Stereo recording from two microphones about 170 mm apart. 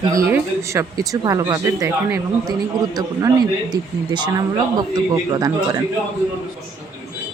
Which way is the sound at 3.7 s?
25° right (ahead or behind).